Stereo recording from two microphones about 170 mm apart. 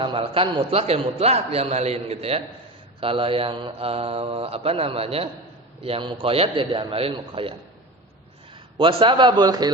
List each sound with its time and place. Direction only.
0.0 s a man's voice: 30° right (ahead or behind)
8.8 s a man's voice: 30° right (ahead or behind)